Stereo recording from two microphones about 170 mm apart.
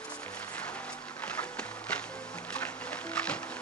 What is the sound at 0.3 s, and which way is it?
Music, 10° left (ahead or behind).